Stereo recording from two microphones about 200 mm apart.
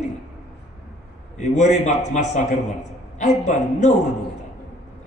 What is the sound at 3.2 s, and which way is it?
Speech, 35° left (ahead or behind).